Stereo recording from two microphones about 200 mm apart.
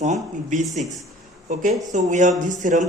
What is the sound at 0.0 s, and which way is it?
Speech, 35° right (ahead or behind).